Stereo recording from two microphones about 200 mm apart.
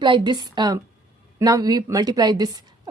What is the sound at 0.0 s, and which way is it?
A woman's voice, 20° right (ahead or behind).